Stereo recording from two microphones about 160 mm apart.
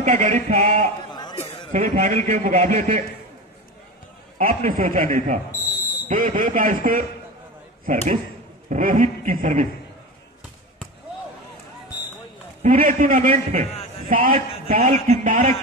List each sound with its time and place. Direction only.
0.0 s a man's voice: 50° right (ahead or behind)
1.1 s a sound: 25° left (ahead or behind)
1.7 s a man's voice: 60° right (ahead or behind)
4.4 s a man's voice: 60° right (ahead or behind)
12.6 s a man's voice: 55° right (ahead or behind)
14.0 s a man's voice: 60° right (ahead or behind)